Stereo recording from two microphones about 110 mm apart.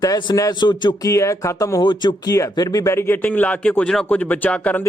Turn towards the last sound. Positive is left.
turn(degrees=15)  # may be behind; listen again after turning